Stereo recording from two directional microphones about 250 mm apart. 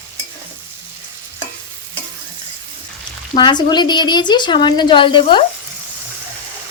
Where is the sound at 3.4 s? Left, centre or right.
Centre.